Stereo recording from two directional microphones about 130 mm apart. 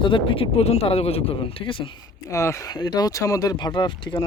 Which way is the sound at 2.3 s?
20° left (ahead or behind).